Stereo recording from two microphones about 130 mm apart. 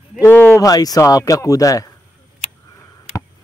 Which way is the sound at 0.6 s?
30° left (ahead or behind).